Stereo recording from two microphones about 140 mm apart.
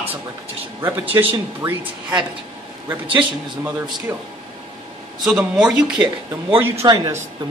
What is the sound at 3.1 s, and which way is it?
A man's voice, 15° right (ahead or behind).